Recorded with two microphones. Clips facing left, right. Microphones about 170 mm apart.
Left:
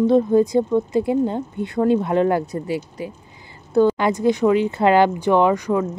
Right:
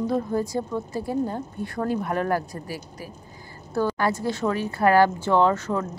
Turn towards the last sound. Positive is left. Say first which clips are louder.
# left 4 dB
turn(degrees=15)  # may be behind; listen again after turning